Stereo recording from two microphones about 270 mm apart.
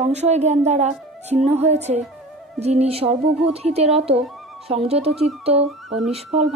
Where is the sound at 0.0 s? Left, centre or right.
Right.